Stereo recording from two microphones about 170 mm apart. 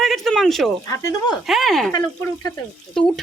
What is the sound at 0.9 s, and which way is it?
Speech, 20° left (ahead or behind).